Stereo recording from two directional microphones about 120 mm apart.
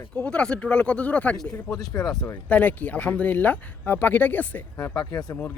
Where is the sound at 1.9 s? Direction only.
25° left (ahead or behind).